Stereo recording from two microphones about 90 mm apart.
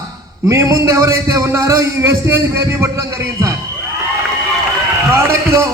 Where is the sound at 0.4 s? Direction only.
35° right (ahead or behind).